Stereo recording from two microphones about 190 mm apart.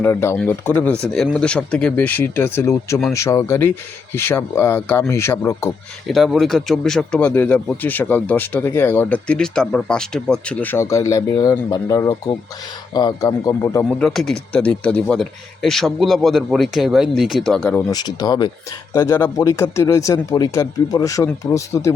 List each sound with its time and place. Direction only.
0.0 s speech: 15° left (ahead or behind)
6.1 s a man's voice: centre (ahead or behind); by 13.8 s 20° left (ahead or behind)
14.0 s speech: centre (ahead or behind); by 21.9 s 15° left (ahead or behind)